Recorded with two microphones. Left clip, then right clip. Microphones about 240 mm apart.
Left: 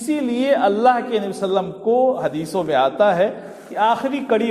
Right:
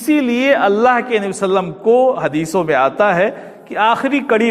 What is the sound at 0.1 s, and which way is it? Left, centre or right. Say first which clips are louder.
Speech: right 5 dB; right.